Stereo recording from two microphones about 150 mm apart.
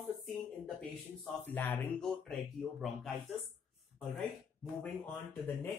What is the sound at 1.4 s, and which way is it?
Speech, 10° left (ahead or behind).